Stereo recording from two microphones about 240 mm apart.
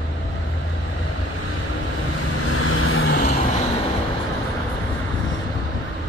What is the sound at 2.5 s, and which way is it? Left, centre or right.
Vehicle, left.